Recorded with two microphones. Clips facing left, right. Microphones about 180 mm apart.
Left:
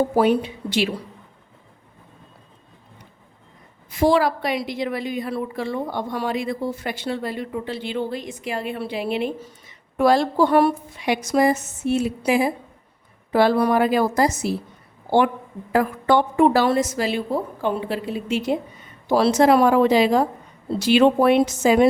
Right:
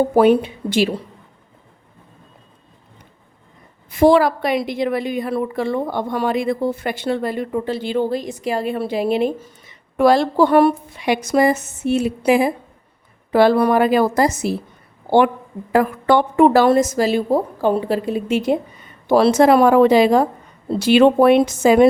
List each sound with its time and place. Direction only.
0.2 s a woman's voice: 55° right (ahead or behind)
3.8 s a woman's voice: 55° right (ahead or behind); by 9.5 s 40° right (ahead or behind)
9.6 s a woman's voice: 75° right (ahead or behind); by 14.5 s 55° right (ahead or behind)
15.7 s a woman's voice: 65° right (ahead or behind)